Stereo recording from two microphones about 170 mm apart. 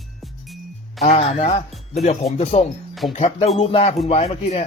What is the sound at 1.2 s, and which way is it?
Speech, 35° left (ahead or behind).